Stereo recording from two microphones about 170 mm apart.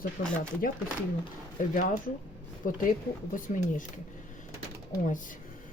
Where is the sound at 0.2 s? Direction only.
55° left (ahead or behind).